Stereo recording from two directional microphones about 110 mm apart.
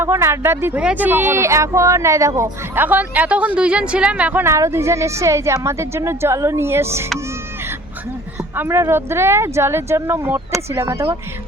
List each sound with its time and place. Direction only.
0.0 s speech: 25° right (ahead or behind)
4.4 s speech: 25° right (ahead or behind)
8.5 s speech: 25° right (ahead or behind)